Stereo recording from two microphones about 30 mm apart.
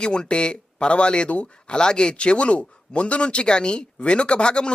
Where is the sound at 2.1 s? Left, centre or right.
Left.